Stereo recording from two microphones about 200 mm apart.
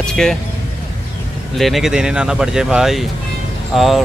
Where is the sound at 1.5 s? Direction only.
Centre (ahead or behind).